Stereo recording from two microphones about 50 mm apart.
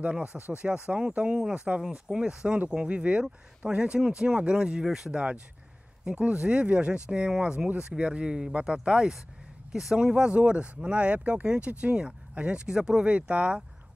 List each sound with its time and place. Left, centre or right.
0.0 s speech: right
5.1 s speech: right
13.0 s speech: right